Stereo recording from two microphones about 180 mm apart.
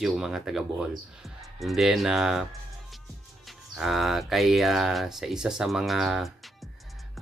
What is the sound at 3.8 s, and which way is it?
Speech, centre (ahead or behind).